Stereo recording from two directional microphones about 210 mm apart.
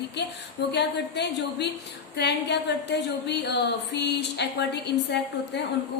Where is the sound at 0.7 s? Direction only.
55° left (ahead or behind).